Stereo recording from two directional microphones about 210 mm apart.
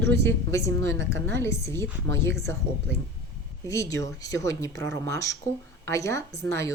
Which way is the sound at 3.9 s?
15° left (ahead or behind).